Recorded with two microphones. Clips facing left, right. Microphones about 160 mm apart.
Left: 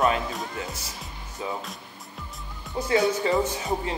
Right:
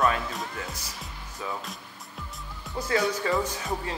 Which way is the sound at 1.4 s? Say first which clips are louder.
Left 3 dB; 20° left (ahead or behind).